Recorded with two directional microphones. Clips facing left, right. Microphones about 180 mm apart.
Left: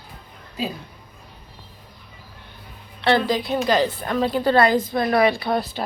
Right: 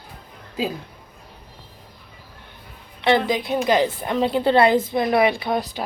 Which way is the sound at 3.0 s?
15° right (ahead or behind).